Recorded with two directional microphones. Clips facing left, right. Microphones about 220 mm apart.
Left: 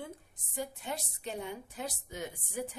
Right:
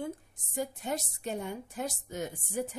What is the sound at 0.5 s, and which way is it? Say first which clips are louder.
A woman's voice: right 4 dB; 45° right (ahead or behind).